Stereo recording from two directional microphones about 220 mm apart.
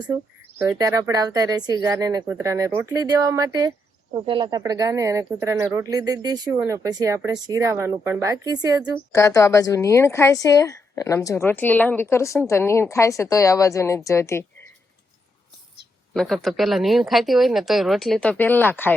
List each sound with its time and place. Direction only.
0.6 s a woman's voice: 15° right (ahead or behind)
9.1 s speech: 15° left (ahead or behind)
16.1 s speech: centre (ahead or behind)